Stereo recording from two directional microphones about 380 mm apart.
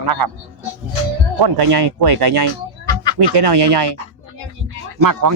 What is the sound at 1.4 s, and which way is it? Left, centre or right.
Speech, right.